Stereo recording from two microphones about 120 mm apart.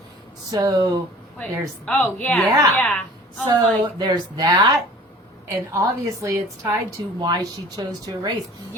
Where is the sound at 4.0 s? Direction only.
30° right (ahead or behind).